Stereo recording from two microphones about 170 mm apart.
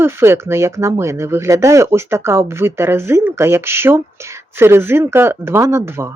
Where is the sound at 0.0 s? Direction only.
15° right (ahead or behind).